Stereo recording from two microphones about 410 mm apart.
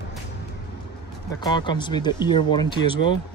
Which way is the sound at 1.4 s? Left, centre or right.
Centre.